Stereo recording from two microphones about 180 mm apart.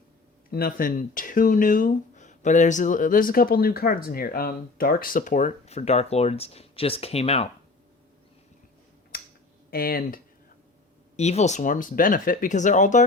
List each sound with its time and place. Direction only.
0.5 s speech: 55° left (ahead or behind); by 7.4 s 35° left (ahead or behind)
9.6 s speech: 55° left (ahead or behind)
11.2 s speech: 40° left (ahead or behind)